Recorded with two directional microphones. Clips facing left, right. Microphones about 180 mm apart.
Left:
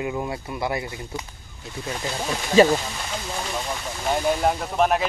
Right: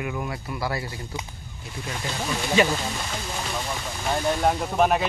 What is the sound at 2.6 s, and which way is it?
Speech, 35° left (ahead or behind).